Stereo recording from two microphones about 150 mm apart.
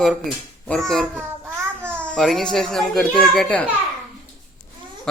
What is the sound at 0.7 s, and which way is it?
A child's voice, centre (ahead or behind).